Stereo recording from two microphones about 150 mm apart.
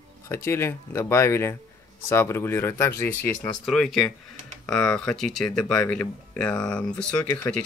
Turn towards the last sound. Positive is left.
turn(degrees=10)  # may be behind; listen again after turning